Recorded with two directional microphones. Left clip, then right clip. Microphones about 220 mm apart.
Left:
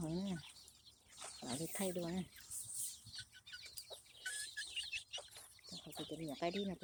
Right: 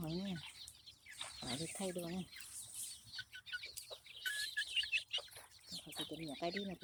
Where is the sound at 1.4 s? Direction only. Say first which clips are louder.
Left 1 dB; centre (ahead or behind).